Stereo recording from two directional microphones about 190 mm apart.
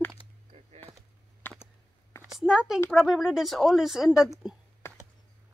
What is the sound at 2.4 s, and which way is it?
Speech, 5° right (ahead or behind).